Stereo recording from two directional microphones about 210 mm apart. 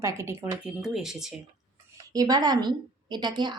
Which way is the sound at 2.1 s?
20° right (ahead or behind).